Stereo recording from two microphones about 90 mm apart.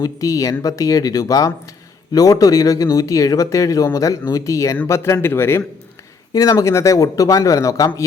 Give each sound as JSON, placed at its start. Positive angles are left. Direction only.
{"t": 0.0, "sound": "a man's voice", "side_deg": 40}
{"t": 6.3, "sound": "speech", "side_deg": 40}